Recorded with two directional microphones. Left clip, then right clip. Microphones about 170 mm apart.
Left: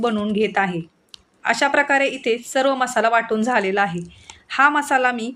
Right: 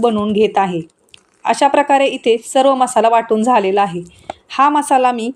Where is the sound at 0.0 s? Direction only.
15° right (ahead or behind).